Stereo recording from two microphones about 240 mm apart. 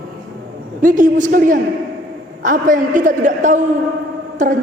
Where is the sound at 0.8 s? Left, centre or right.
Right.